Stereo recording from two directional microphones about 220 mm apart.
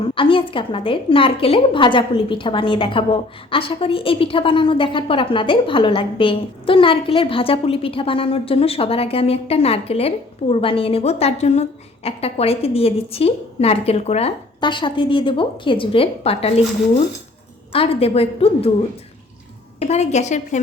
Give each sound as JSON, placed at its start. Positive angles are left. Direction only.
{"t": 0.1, "sound": "a woman's voice", "side_deg": 25}
{"t": 17.7, "sound": "a woman's voice", "side_deg": 25}
{"t": 19.8, "sound": "a woman's voice", "side_deg": 30}